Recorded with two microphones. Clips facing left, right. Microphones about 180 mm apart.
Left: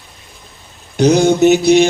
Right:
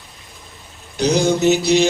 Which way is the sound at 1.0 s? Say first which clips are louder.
Left 6 dB; 55° left (ahead or behind).